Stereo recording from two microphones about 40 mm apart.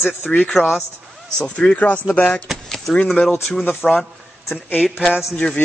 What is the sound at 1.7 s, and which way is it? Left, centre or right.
Speech, left.